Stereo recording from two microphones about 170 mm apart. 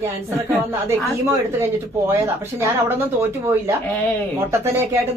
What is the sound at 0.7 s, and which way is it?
Speech, 15° right (ahead or behind).